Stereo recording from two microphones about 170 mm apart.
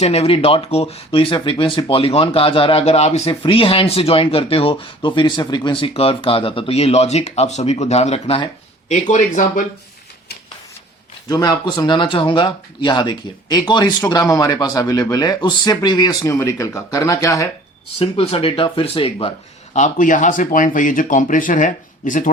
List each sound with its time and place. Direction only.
0.0 s speech: 35° left (ahead or behind)
8.9 s speech: 45° left (ahead or behind)
11.3 s speech: 25° left (ahead or behind)
18.0 s speech: 35° left (ahead or behind)
19.7 s speech: 45° left (ahead or behind)